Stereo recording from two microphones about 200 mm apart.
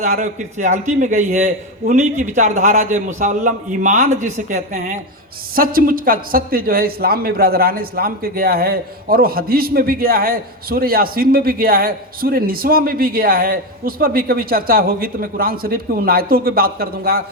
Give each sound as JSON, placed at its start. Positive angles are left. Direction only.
{"t": 0.0, "sound": "a man's voice", "side_deg": -40}